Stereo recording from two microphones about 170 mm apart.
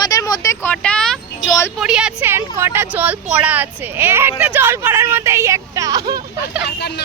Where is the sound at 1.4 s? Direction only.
20° left (ahead or behind).